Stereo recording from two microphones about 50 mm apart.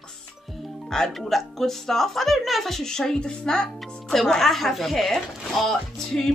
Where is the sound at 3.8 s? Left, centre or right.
Centre.